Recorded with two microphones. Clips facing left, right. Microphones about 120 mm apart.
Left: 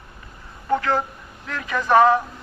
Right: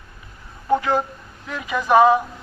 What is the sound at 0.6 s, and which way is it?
Speech, 15° right (ahead or behind).